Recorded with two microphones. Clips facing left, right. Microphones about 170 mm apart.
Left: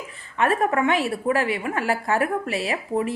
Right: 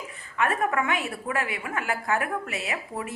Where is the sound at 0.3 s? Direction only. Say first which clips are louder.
Left 4 dB; 30° left (ahead or behind).